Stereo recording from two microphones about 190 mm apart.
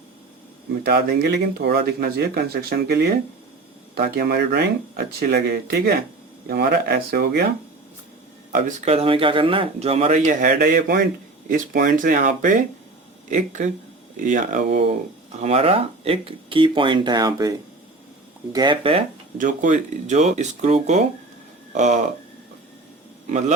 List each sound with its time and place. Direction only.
0.9 s speech: 55° right (ahead or behind)
8.5 s speech: 40° right (ahead or behind); by 17.5 s 20° right (ahead or behind)
18.5 s speech: 25° right (ahead or behind)
19.4 s speech: 45° right (ahead or behind)
23.2 s speech: 35° right (ahead or behind)